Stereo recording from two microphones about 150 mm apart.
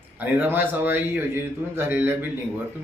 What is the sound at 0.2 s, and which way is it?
Speech, 10° right (ahead or behind).